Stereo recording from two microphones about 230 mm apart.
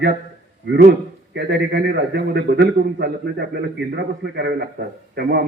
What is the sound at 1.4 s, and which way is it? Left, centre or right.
A man's voice, right.